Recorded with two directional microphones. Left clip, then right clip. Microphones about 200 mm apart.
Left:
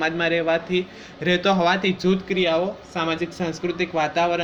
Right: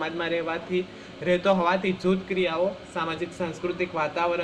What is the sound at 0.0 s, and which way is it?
Speech, 45° left (ahead or behind).